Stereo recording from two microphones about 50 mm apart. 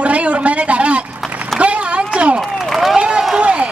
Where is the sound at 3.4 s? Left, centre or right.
Right.